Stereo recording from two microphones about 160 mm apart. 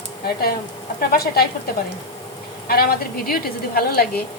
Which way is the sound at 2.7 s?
70° left (ahead or behind).